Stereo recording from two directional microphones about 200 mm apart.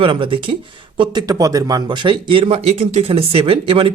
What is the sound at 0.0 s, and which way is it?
Speech, 25° right (ahead or behind).